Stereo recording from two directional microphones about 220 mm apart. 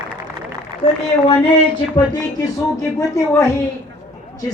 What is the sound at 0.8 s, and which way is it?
Speech, 30° left (ahead or behind).